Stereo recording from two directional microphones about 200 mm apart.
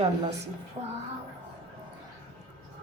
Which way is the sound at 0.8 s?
25° right (ahead or behind).